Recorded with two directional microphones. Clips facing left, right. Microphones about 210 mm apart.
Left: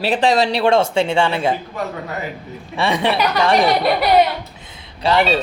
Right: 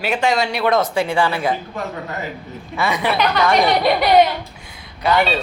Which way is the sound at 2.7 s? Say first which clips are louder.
Left 2 dB; 30° left (ahead or behind).